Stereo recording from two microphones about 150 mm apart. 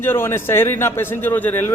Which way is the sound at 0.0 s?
15° left (ahead or behind).